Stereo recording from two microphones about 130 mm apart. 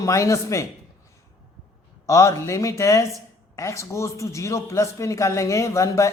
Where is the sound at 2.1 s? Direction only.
20° left (ahead or behind).